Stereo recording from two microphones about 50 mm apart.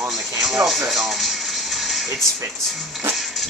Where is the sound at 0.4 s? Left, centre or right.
Centre.